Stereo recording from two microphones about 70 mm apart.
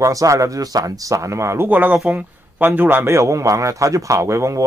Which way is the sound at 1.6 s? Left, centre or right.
Right.